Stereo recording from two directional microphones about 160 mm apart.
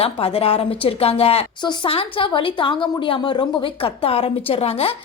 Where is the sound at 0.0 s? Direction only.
35° left (ahead or behind).